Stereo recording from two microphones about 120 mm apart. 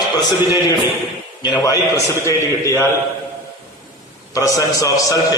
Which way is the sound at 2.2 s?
25° left (ahead or behind).